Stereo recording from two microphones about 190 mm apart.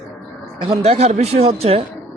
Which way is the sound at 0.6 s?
30° right (ahead or behind).